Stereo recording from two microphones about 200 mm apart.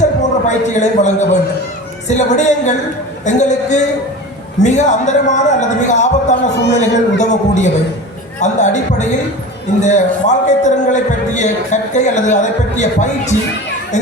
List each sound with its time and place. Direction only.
0.0 s a man's voice: 35° left (ahead or behind)